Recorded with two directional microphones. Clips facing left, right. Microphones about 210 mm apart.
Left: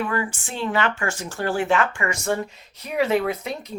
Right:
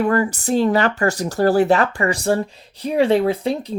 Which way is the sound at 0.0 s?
40° right (ahead or behind).